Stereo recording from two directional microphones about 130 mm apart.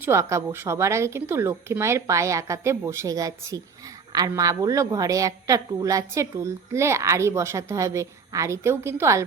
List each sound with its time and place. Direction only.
0.0 s a woman's voice: 20° right (ahead or behind)